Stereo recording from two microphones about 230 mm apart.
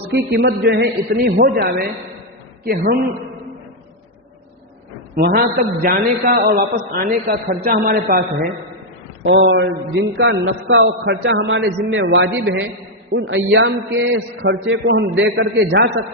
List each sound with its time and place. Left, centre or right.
0.1 s a man's voice: right
5.1 s a man's voice: right